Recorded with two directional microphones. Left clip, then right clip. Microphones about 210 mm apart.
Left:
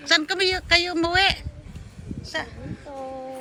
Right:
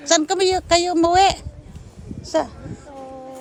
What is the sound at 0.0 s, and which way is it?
Speech, 25° right (ahead or behind).